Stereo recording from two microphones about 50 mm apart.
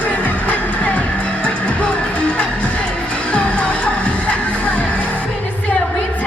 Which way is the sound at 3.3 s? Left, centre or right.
Left.